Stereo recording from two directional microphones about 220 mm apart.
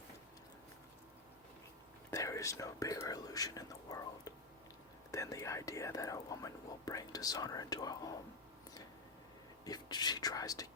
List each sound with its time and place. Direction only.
2.0 s speech: 15° left (ahead or behind)
9.6 s speech: 20° left (ahead or behind)